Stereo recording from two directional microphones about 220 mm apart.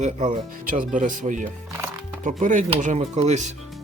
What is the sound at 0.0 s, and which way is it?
Speech, 35° right (ahead or behind).